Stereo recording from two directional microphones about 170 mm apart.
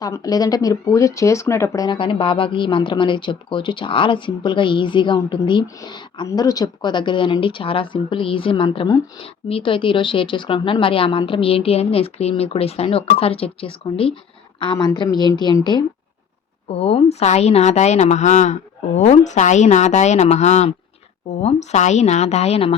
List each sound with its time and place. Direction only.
0.0 s speech: 20° left (ahead or behind)
16.6 s a woman's voice: 35° left (ahead or behind)